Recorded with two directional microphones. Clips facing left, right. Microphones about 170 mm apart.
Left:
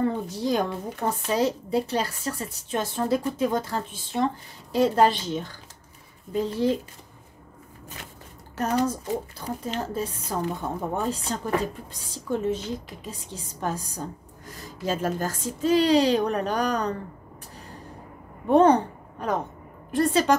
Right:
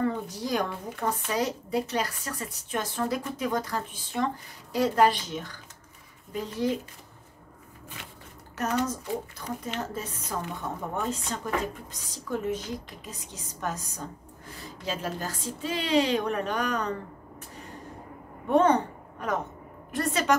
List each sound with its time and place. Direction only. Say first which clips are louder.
0.0 s speech: left 3 dB; 30° left (ahead or behind)
8.5 s speech: left 4 dB; 30° left (ahead or behind)
14.6 s speech: left 6 dB; 45° left (ahead or behind)
18.5 s a woman's voice: left 4 dB; 35° left (ahead or behind)